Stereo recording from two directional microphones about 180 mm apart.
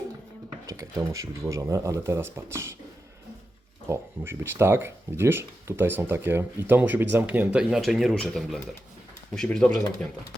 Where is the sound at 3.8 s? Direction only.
15° right (ahead or behind); by 10.1 s 5° left (ahead or behind).